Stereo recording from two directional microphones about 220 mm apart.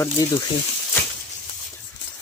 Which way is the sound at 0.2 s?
15° left (ahead or behind).